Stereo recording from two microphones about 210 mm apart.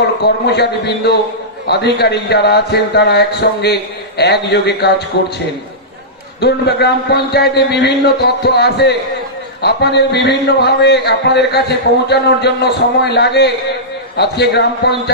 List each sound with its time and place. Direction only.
0.5 s a man's voice: 50° left (ahead or behind)
6.4 s a man's voice: 50° left (ahead or behind)